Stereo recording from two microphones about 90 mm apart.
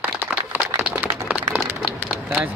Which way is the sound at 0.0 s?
20° right (ahead or behind).